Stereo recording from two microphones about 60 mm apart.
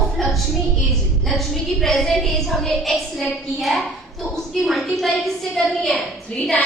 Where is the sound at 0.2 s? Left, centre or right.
Centre.